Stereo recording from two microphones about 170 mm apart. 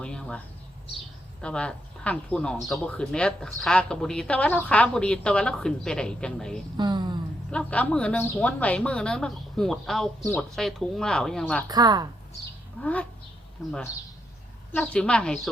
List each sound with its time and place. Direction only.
0.0 s speech: 5° left (ahead or behind)
6.7 s a sound: 25° right (ahead or behind)
7.5 s a woman's voice: 10° left (ahead or behind)
11.7 s speech: 25° right (ahead or behind)
12.8 s a woman's voice: 10° left (ahead or behind)